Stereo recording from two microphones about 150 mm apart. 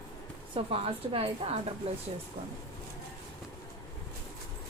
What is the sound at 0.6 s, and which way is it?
Speech, 40° right (ahead or behind).